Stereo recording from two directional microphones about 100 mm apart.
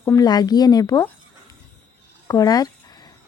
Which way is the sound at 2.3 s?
40° left (ahead or behind).